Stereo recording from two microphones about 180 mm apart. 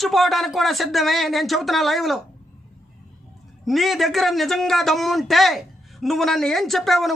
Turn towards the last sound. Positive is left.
turn(degrees=0)  # may be behind; listen again after turning